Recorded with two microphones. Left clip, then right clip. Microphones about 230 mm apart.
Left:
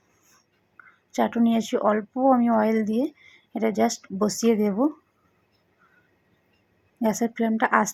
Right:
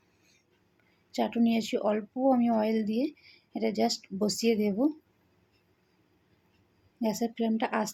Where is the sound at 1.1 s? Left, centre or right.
Centre.